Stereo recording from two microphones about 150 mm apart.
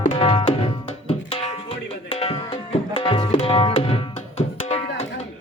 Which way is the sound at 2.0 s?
40° left (ahead or behind).